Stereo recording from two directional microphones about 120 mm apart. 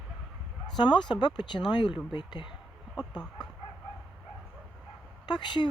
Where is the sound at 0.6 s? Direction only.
40° left (ahead or behind).